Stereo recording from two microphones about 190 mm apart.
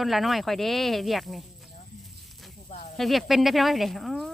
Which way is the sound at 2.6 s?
35° left (ahead or behind).